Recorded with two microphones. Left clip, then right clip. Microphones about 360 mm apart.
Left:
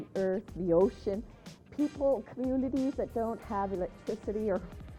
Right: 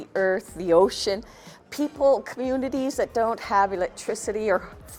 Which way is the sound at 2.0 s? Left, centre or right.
Centre.